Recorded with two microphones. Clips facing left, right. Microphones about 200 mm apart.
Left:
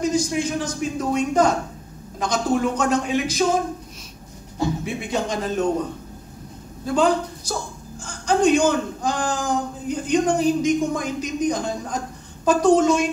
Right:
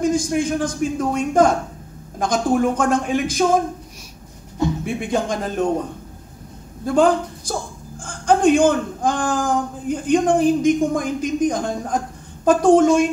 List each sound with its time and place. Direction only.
0.0 s a man's voice: 50° right (ahead or behind)
4.8 s a man's voice: 50° right (ahead or behind)
6.9 s a man's voice: 50° right (ahead or behind)